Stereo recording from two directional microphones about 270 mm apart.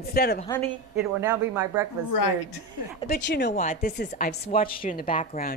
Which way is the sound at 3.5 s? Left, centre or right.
Left.